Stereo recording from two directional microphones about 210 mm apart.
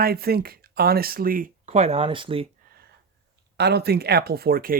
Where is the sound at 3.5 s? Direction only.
50° right (ahead or behind).